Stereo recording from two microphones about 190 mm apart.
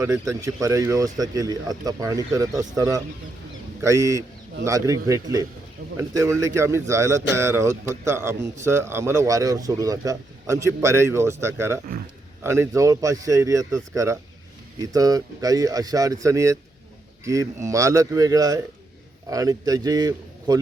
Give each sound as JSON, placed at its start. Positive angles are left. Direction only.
{"t": 0.0, "sound": "a man's voice", "side_deg": -15}